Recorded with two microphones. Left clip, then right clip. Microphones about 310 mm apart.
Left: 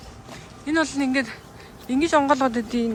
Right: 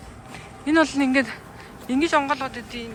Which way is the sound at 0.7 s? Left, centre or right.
Centre.